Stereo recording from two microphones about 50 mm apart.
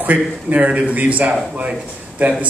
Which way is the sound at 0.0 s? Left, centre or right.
Right.